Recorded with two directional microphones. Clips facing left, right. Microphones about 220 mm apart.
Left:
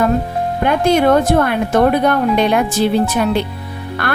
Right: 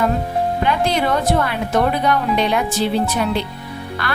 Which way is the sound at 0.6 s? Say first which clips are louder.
Left 9 dB; 50° left (ahead or behind).